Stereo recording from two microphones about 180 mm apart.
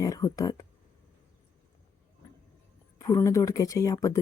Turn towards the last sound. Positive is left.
turn(degrees=20)  # may be behind; listen again after turning